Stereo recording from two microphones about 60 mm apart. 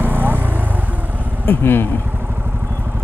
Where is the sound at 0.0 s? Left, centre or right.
Right.